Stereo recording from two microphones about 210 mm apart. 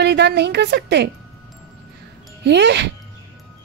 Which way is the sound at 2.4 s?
55° right (ahead or behind).